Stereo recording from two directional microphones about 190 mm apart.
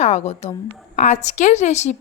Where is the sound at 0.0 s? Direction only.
35° left (ahead or behind).